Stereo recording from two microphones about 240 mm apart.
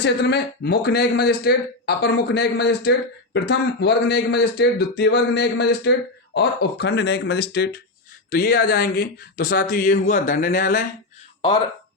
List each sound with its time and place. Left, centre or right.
0.0 s a man's voice: left